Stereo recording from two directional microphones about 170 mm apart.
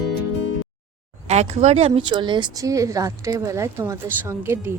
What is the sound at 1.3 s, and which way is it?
Speech, 40° right (ahead or behind).